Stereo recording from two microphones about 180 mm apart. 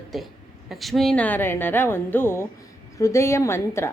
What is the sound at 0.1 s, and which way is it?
A woman's voice, centre (ahead or behind).